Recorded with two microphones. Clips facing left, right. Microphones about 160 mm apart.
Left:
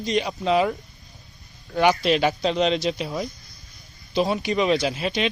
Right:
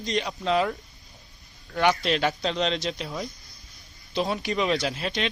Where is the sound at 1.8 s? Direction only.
5° left (ahead or behind).